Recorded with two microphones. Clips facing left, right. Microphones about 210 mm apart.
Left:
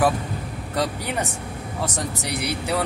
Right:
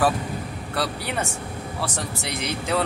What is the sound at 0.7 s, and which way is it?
Speech, 15° left (ahead or behind).